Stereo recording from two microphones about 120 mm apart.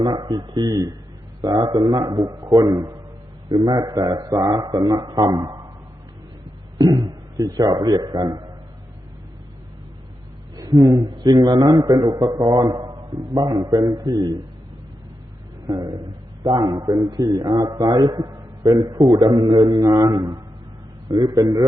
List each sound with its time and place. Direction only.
0.0 s a man's voice: 35° right (ahead or behind)
6.7 s a man's voice: 35° right (ahead or behind)
10.6 s a man's voice: 30° right (ahead or behind)
15.6 s a man's voice: 35° right (ahead or behind)